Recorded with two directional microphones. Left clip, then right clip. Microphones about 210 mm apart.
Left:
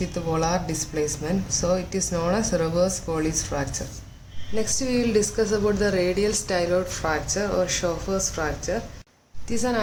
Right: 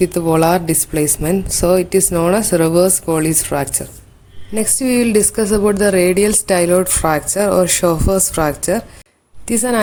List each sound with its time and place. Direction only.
0.0 s a woman's voice: 45° right (ahead or behind)